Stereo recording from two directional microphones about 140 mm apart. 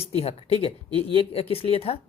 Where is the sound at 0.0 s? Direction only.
45° left (ahead or behind).